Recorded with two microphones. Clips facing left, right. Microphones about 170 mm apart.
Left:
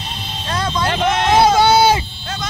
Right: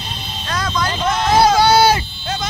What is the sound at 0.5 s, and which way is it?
Vehicle, 30° left (ahead or behind).